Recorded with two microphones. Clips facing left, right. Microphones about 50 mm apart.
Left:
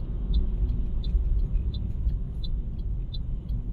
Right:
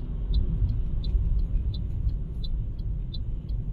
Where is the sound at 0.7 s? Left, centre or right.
Left.